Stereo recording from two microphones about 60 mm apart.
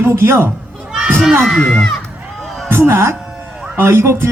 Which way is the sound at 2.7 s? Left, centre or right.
Right.